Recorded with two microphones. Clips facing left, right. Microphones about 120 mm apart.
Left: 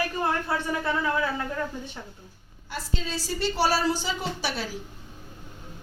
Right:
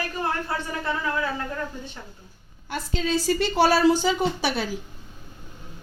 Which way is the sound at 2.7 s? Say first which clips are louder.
Right 7 dB; 60° right (ahead or behind).